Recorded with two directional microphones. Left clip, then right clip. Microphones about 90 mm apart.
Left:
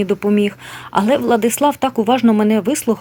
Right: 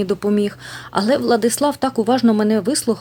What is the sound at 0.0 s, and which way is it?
Speech, 10° right (ahead or behind).